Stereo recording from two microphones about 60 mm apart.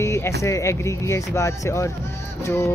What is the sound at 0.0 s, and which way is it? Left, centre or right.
Speech, left.